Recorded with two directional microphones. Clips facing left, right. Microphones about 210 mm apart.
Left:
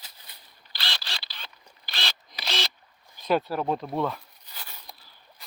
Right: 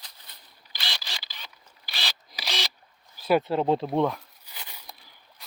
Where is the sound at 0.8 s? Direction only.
10° right (ahead or behind).